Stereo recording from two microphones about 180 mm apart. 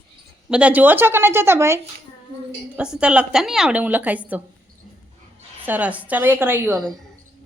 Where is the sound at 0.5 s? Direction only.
10° right (ahead or behind).